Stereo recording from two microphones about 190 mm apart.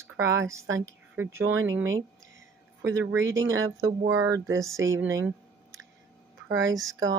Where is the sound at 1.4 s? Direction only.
90° right.